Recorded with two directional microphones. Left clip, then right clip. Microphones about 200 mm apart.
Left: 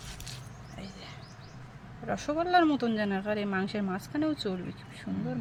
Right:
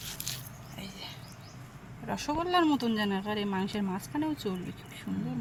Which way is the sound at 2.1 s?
20° left (ahead or behind).